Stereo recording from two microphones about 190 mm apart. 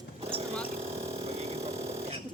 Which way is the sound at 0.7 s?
30° right (ahead or behind).